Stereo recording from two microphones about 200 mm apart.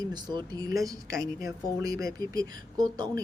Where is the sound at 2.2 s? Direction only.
20° right (ahead or behind).